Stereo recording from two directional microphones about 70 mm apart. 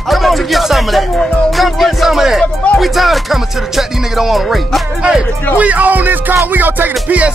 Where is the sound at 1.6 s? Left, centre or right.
Centre.